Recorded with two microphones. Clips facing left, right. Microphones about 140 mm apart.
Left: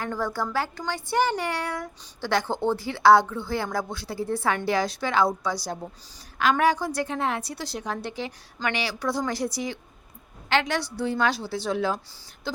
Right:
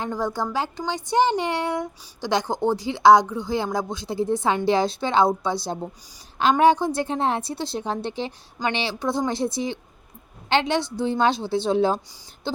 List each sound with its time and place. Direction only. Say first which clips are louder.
0.0 s speech: right 2 dB; 15° right (ahead or behind)